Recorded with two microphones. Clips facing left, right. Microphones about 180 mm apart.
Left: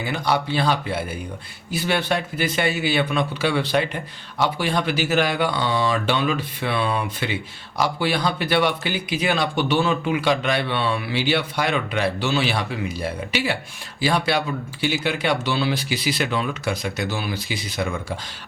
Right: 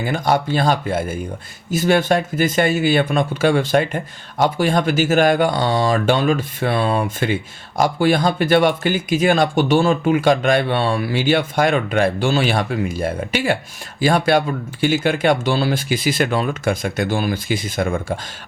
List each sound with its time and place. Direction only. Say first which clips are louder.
0.0 s speech: right 4 dB; 45° right (ahead or behind)